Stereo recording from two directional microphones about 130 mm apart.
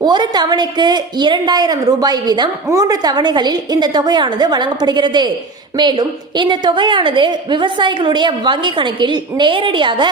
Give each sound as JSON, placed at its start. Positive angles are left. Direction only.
{"t": 0.0, "sound": "a woman's voice", "side_deg": -35}